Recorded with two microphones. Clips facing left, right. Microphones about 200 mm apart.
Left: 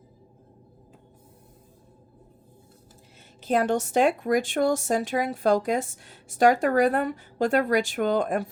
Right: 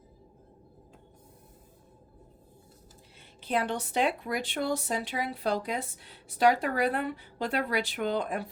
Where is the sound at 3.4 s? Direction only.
45° left (ahead or behind).